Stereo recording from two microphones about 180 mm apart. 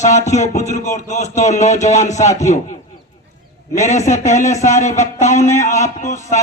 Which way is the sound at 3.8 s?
40° left (ahead or behind).